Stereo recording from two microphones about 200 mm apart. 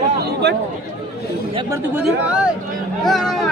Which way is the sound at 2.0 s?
5° right (ahead or behind).